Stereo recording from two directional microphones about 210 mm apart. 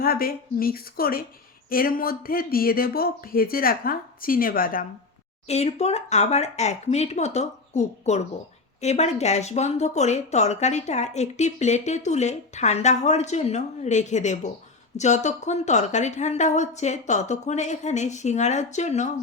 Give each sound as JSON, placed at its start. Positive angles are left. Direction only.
{"t": 0.0, "sound": "speech", "side_deg": 45}
{"t": 5.5, "sound": "speech", "side_deg": 30}